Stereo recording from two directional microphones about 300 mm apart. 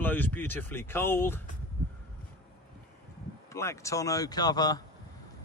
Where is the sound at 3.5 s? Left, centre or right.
Centre.